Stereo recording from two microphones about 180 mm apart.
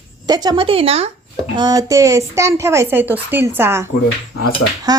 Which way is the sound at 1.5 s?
20° right (ahead or behind).